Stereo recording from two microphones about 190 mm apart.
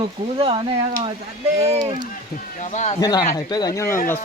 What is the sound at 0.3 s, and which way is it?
Speech, 25° right (ahead or behind).